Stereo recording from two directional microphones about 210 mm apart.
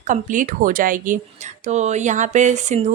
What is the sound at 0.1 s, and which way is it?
A woman's voice, 40° right (ahead or behind).